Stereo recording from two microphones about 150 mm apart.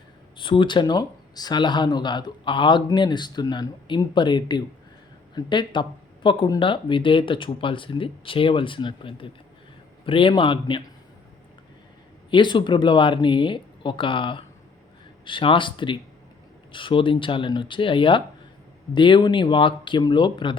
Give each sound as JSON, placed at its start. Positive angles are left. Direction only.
{"t": 0.3, "sound": "speech", "side_deg": 35}
{"t": 12.3, "sound": "speech", "side_deg": 30}